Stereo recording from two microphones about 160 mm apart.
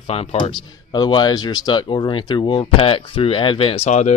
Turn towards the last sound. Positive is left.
turn(degrees=45)  # may be behind; listen again after turning